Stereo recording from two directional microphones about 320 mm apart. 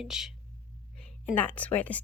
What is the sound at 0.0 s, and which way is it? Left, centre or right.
A woman's voice, centre.